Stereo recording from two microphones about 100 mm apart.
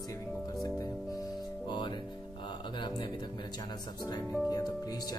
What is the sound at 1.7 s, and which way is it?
Music, 55° left (ahead or behind).